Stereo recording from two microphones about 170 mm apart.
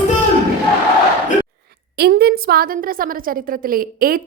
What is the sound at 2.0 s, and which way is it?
A woman's voice, 70° right (ahead or behind).